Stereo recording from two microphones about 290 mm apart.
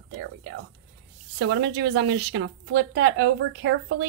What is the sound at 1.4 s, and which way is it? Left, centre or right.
A woman's voice, right.